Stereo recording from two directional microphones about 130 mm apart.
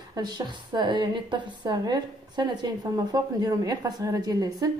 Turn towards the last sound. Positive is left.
turn(degrees=-30)  # may be behind; listen again after turning